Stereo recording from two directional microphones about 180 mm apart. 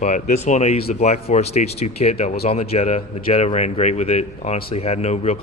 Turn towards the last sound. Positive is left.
turn(degrees=35)  # may be behind; listen again after turning